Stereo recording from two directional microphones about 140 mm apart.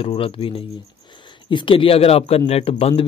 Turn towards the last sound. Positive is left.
turn(degrees=45)  # may be behind; listen again after turning